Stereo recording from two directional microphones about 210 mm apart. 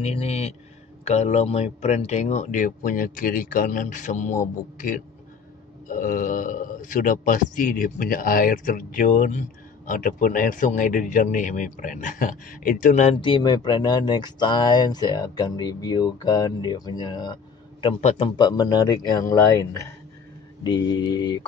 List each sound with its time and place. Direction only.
0.0 s a man's voice: 30° left (ahead or behind)
13.2 s speech: 20° left (ahead or behind)